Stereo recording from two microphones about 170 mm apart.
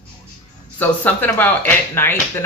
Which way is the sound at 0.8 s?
10° left (ahead or behind).